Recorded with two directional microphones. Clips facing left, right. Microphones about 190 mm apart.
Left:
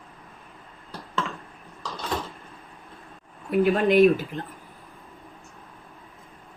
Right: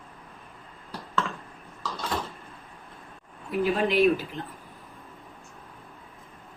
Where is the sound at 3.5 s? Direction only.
55° left (ahead or behind).